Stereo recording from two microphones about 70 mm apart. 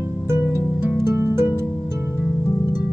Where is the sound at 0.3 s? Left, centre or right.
Right.